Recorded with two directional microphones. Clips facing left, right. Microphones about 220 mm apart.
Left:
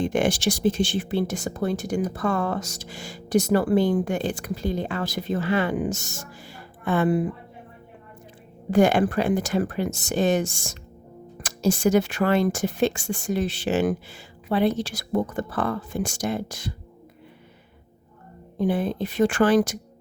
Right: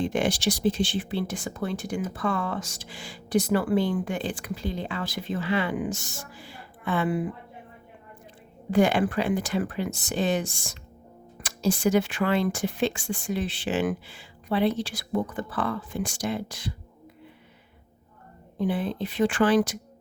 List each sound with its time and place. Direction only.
0.0 s speech: 50° left (ahead or behind)
8.7 s speech: 45° left (ahead or behind)
18.6 s speech: 45° left (ahead or behind)